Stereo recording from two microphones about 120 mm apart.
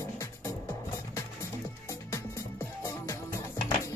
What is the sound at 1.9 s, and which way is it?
Music, 25° left (ahead or behind).